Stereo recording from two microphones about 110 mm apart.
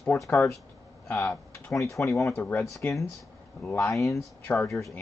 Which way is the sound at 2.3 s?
15° left (ahead or behind).